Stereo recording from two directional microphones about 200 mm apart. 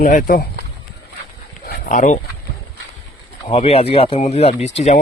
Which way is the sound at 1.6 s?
45° left (ahead or behind).